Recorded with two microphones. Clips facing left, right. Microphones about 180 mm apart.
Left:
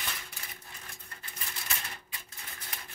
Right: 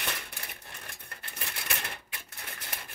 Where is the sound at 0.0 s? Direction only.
65° right (ahead or behind).